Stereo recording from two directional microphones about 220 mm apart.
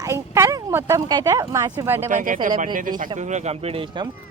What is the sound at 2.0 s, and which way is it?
Speech, 35° right (ahead or behind).